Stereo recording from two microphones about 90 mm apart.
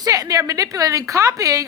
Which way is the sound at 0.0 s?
45° right (ahead or behind).